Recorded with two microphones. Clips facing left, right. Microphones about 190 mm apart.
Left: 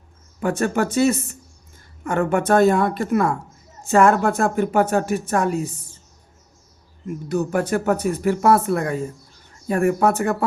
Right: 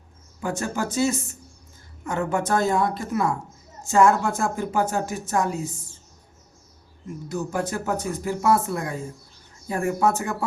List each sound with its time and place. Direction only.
0.3 s speech: 65° left (ahead or behind)
7.3 s speech: 65° left (ahead or behind)